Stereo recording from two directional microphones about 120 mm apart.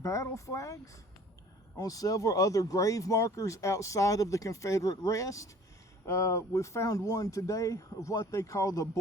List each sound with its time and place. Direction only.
0.0 s speech: 25° left (ahead or behind)
1.8 s speech: 30° left (ahead or behind)